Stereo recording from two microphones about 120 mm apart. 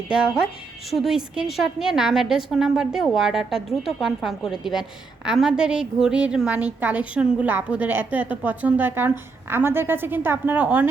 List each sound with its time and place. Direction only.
0.1 s a woman's voice: 5° right (ahead or behind)